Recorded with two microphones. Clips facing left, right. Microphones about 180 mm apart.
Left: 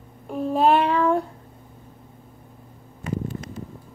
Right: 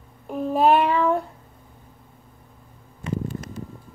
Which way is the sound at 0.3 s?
5° right (ahead or behind).